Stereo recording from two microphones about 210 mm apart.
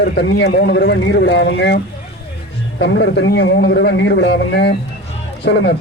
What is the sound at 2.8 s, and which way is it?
A man's voice, 55° left (ahead or behind).